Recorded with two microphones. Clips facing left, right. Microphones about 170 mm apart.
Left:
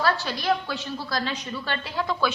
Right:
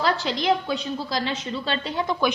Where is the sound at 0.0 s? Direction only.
20° right (ahead or behind).